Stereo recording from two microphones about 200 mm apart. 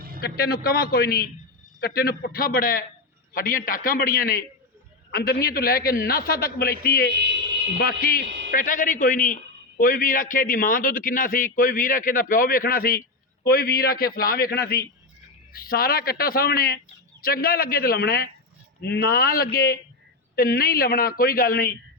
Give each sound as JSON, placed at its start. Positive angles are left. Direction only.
{"t": 0.2, "sound": "a man's voice", "side_deg": 50}